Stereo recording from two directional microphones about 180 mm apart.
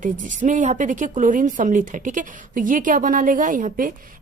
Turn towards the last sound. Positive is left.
turn(degrees=-50)  # may be behind; listen again after turning